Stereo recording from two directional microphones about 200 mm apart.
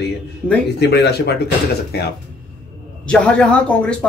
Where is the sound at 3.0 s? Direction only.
5° left (ahead or behind).